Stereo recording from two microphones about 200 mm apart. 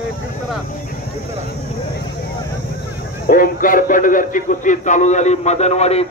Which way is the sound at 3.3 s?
45° left (ahead or behind).